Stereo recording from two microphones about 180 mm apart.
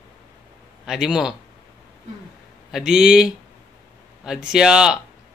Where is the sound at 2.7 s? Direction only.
5° right (ahead or behind).